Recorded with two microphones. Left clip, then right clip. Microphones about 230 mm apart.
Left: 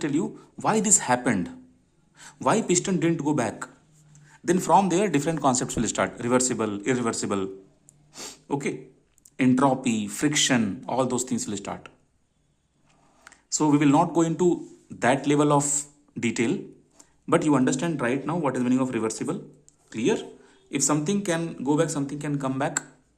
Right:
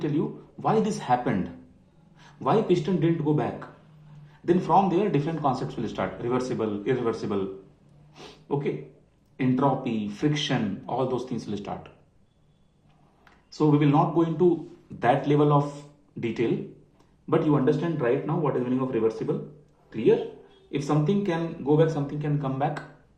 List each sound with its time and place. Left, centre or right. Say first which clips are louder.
0.0 s a man's voice: left 1 dB; left
13.2 s a man's voice: even; left
20.7 s speech: left 1 dB; left